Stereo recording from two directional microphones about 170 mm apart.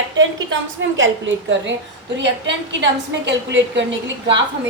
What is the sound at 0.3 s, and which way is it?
A woman's voice, 90° right.